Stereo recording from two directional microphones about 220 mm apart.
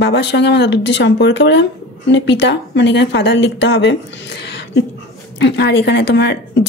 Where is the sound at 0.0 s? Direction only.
50° left (ahead or behind).